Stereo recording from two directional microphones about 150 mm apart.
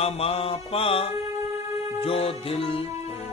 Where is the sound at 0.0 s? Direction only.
40° left (ahead or behind).